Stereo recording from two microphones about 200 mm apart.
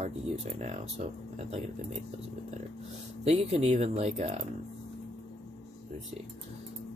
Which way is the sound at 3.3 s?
30° right (ahead or behind).